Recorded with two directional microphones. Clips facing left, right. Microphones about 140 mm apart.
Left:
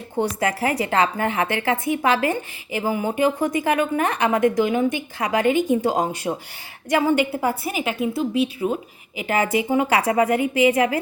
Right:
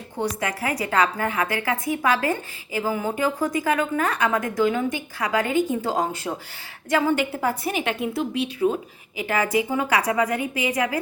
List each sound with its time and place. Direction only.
0.2 s a woman's voice: 30° left (ahead or behind); by 8.7 s 5° left (ahead or behind)
9.2 s a woman's voice: 25° left (ahead or behind)